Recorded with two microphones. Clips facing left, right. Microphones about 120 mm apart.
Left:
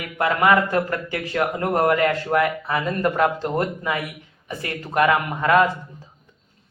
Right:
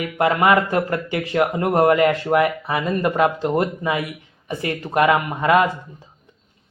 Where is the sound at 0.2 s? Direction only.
20° right (ahead or behind).